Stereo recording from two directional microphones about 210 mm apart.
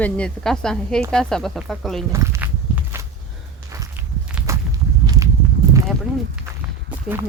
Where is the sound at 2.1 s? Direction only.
15° right (ahead or behind).